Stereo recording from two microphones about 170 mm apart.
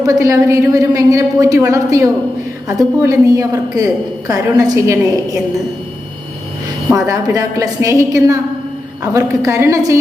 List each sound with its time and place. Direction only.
0.0 s a woman's voice: 20° right (ahead or behind)
6.9 s a woman's voice: 20° right (ahead or behind)